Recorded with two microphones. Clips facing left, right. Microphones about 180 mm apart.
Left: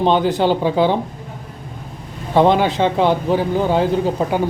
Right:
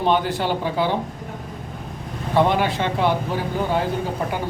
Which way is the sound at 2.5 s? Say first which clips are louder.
Left 6 dB; 20° left (ahead or behind).